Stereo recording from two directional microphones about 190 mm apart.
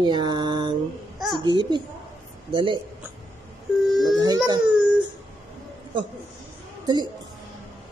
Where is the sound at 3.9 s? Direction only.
Centre (ahead or behind).